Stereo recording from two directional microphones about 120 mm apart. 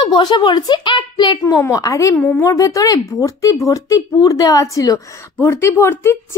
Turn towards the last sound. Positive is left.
turn(degrees=25)  # may be behind; listen again after turning